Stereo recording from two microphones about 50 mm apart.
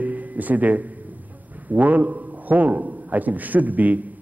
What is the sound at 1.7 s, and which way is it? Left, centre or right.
A man's voice, right.